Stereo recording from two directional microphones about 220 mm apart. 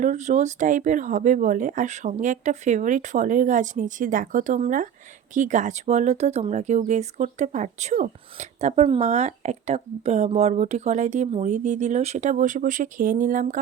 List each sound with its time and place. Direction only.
0.0 s speech: 35° right (ahead or behind)